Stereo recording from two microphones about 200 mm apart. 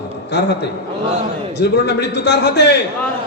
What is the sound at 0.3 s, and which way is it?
A man's voice, 55° left (ahead or behind).